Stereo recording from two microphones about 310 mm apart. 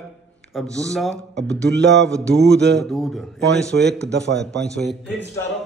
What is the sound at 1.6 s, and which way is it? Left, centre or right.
Speech, right.